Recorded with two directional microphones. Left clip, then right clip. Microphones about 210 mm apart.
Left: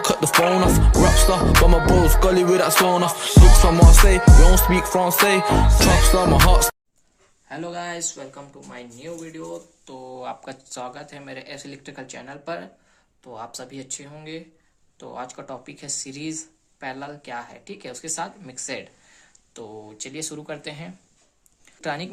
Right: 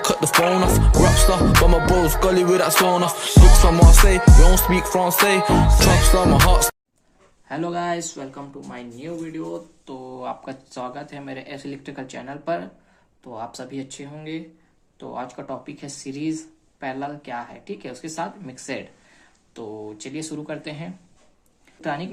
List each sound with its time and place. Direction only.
0.0 s music: centre (ahead or behind)
7.4 s speech: centre (ahead or behind); by 22.1 s 25° left (ahead or behind)